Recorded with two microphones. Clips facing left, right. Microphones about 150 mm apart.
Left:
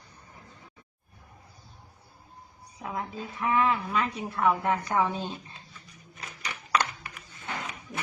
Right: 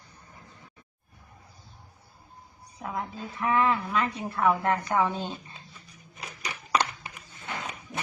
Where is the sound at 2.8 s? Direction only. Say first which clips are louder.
Even; centre (ahead or behind).